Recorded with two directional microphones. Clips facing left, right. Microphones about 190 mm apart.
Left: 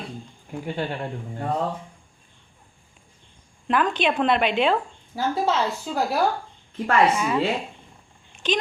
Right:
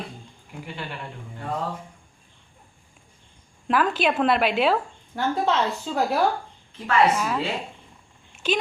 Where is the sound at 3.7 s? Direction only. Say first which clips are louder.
Even; 5° right (ahead or behind).